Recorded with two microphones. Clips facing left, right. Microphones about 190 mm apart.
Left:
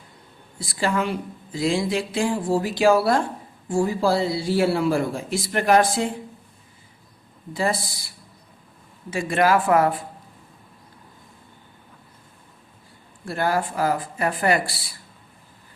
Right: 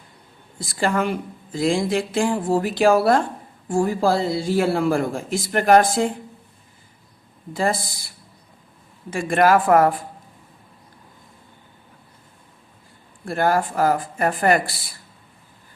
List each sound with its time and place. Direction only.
0.6 s a man's voice: 50° right (ahead or behind)
7.5 s a man's voice: 50° right (ahead or behind)
13.2 s a man's voice: 50° right (ahead or behind)